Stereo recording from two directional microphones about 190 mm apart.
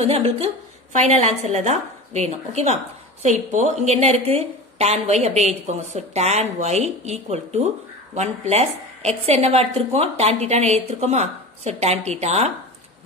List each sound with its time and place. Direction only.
0.0 s a woman's voice: 30° right (ahead or behind)